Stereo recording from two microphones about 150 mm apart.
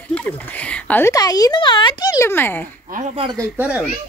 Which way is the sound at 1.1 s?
25° left (ahead or behind).